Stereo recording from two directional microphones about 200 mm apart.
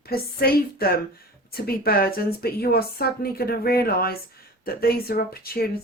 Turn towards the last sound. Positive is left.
turn(degrees=50)  # may be behind; listen again after turning